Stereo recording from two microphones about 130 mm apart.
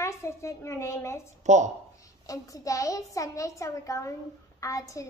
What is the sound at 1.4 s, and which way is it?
Speech, 65° right (ahead or behind).